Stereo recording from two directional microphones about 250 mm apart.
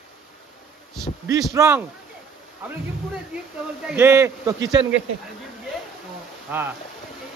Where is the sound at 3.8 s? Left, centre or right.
Centre.